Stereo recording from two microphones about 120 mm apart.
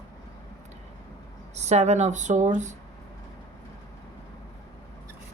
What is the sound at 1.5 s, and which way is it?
Speech, 70° right (ahead or behind).